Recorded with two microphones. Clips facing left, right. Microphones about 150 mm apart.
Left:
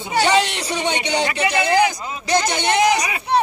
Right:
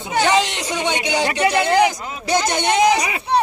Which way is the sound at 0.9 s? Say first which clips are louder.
Even; 10° right (ahead or behind).